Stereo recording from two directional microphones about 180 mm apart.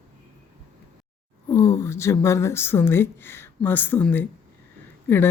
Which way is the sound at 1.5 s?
15° left (ahead or behind).